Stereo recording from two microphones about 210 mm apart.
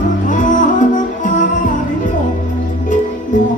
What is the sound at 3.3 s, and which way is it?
Music, 35° left (ahead or behind).